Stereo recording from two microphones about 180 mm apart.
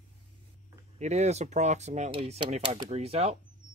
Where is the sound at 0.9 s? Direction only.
40° right (ahead or behind).